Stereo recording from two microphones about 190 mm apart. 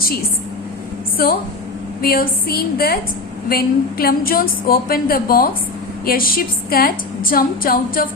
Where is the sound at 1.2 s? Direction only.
50° left (ahead or behind).